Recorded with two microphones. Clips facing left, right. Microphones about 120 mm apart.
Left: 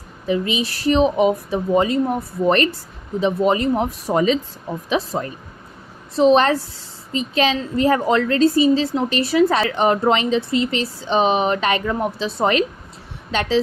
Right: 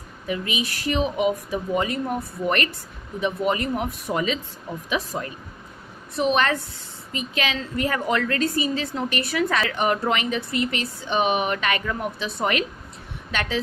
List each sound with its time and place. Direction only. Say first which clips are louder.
0.3 s a woman's voice: left 6 dB; 30° left (ahead or behind)